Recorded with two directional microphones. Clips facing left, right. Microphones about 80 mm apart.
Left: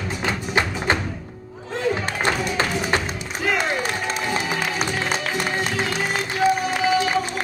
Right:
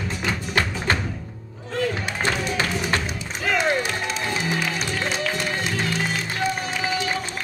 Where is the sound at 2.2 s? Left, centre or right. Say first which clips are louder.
Left 2 dB; left.